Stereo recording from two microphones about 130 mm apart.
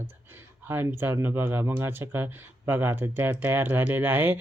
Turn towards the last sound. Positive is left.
turn(degrees=-15)  # may be behind; listen again after turning